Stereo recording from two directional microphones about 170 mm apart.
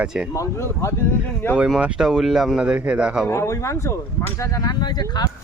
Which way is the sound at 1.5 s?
5° right (ahead or behind).